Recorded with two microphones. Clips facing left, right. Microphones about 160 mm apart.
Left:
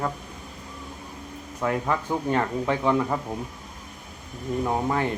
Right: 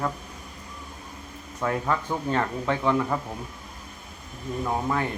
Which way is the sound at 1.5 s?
15° left (ahead or behind).